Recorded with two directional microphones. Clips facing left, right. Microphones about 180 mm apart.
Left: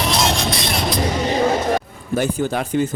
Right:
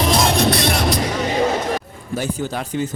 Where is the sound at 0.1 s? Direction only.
60° right (ahead or behind).